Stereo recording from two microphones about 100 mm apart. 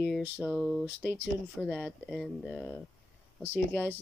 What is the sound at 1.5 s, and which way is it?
Speech, 10° left (ahead or behind).